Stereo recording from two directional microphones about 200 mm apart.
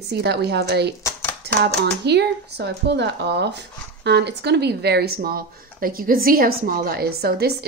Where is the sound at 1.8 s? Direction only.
55° right (ahead or behind).